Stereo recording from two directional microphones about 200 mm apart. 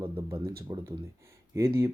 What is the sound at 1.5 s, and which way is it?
Speech, 15° right (ahead or behind).